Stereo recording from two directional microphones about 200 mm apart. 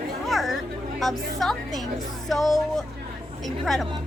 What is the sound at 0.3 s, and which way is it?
Music, centre (ahead or behind).